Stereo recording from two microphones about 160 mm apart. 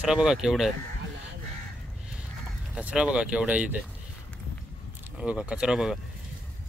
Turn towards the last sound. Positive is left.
turn(degrees=-5)  # may be behind; listen again after turning